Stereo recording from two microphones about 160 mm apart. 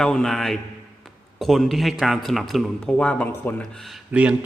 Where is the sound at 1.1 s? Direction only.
Centre (ahead or behind).